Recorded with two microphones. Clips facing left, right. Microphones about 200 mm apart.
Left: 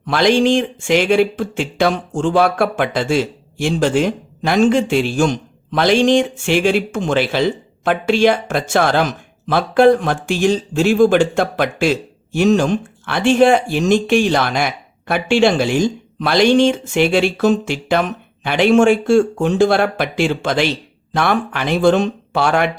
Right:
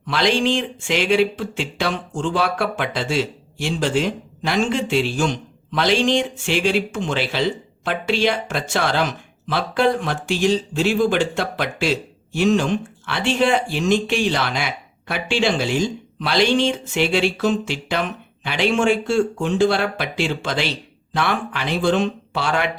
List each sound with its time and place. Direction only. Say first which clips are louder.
0.0 s speech: left 6 dB; 50° left (ahead or behind)